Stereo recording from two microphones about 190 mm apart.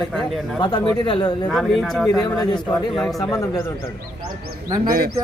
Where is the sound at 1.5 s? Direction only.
Centre (ahead or behind).